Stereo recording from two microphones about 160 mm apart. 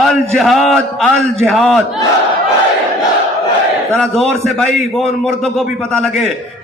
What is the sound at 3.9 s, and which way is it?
Speech, 5° left (ahead or behind).